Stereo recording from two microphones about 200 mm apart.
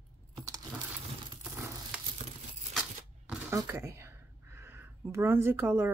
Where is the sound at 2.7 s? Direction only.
5° right (ahead or behind).